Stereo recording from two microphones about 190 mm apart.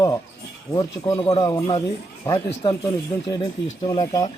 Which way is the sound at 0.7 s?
20° left (ahead or behind).